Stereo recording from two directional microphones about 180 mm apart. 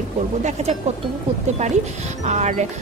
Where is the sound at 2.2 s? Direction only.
40° right (ahead or behind).